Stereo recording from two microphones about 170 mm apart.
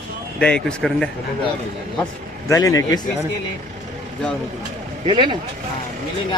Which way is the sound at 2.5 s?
20° left (ahead or behind).